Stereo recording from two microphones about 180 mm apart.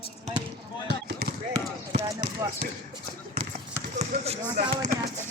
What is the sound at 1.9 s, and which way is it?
Speech, 65° right (ahead or behind).